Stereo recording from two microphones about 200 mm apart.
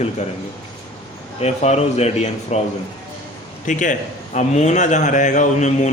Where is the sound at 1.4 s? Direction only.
35° left (ahead or behind).